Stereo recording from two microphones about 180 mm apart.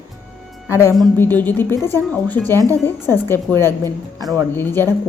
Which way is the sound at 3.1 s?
10° left (ahead or behind).